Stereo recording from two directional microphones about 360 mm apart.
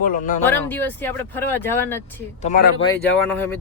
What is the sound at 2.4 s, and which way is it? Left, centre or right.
Speech, left.